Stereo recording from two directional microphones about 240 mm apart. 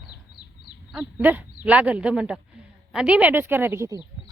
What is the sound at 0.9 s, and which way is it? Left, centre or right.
Speech, centre.